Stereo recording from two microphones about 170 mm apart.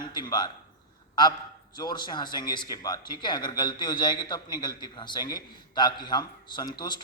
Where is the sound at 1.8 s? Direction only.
25° left (ahead or behind).